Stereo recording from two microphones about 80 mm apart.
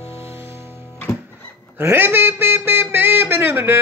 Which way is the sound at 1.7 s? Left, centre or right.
Right.